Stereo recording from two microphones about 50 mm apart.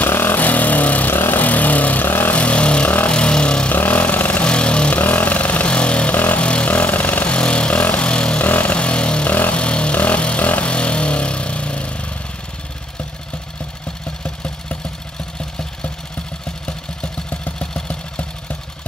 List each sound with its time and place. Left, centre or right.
0.0 s vehicle: left
2.0 s vehicle: left
2.3 s vehicle: left
3.7 s vehicle: left
4.9 s vehicle: left
6.1 s vehicle: left
6.4 s vehicle: left
7.2 s vehicle: left
9.3 s vehicle: left
9.6 s vehicle: left
14.2 s vehicle: left
17.6 s vehicle: left